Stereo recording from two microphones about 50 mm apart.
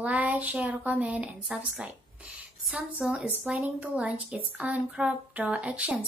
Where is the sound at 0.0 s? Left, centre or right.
Right.